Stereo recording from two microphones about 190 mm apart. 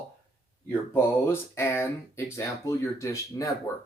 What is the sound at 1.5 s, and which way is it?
Speech, 15° left (ahead or behind).